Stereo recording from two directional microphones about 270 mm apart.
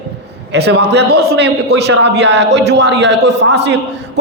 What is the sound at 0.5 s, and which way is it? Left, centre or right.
A man's voice, right.